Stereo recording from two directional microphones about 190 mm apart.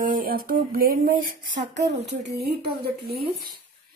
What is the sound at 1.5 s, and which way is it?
Speech, 65° right (ahead or behind).